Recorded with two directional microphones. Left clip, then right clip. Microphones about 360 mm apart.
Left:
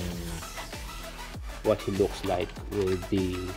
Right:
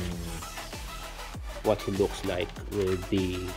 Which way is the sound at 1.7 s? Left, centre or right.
Centre.